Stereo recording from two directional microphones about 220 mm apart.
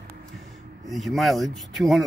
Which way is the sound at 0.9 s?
Centre (ahead or behind).